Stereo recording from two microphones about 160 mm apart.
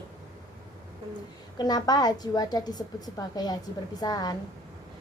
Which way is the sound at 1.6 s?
25° left (ahead or behind).